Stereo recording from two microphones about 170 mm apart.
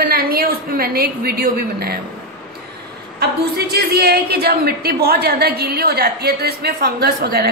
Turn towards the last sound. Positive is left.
turn(degrees=-70)  # may be behind; listen again after turning